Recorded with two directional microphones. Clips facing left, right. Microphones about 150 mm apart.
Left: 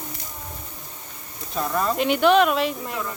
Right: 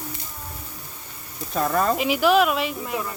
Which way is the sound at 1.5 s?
50° right (ahead or behind).